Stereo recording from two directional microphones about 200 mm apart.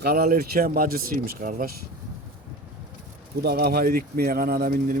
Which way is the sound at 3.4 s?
50° right (ahead or behind).